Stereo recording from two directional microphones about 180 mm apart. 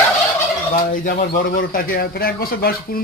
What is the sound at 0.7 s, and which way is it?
A man's voice, 50° left (ahead or behind).